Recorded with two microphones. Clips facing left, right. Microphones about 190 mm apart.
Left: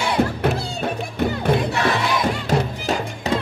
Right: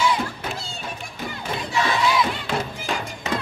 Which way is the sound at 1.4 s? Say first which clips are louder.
Left 3 dB; 60° left (ahead or behind).